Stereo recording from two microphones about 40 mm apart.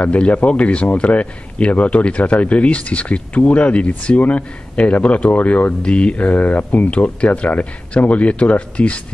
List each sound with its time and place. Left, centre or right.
0.0 s speech: left